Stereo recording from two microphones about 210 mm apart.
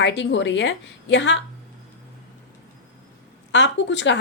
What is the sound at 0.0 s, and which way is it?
A woman's voice, 60° left (ahead or behind).